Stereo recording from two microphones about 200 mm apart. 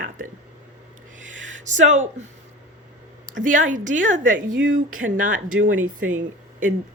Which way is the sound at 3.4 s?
40° right (ahead or behind).